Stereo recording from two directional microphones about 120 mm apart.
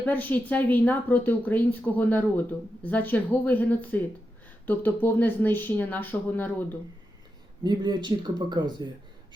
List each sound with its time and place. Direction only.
0.0 s a woman's voice: 15° left (ahead or behind)
7.6 s speech: 35° right (ahead or behind)